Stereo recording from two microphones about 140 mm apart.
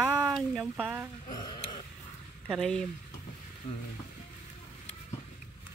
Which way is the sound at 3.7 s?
45° left (ahead or behind).